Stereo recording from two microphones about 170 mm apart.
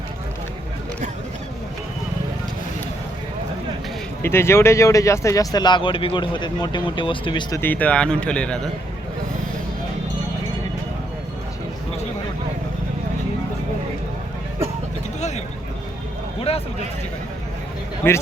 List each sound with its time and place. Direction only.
4.2 s speech: 15° left (ahead or behind)
7.6 s a man's voice: 10° left (ahead or behind)
16.4 s a sound: 35° left (ahead or behind)
18.0 s a man's voice: 15° left (ahead or behind)